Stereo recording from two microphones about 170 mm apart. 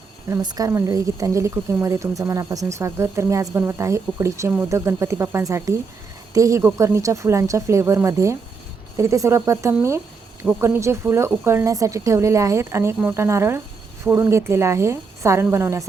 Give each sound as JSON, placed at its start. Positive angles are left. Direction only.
{"t": 0.3, "sound": "speech", "side_deg": -20}